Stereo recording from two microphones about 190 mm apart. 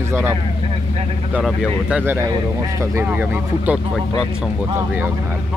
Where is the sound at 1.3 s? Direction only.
5° right (ahead or behind).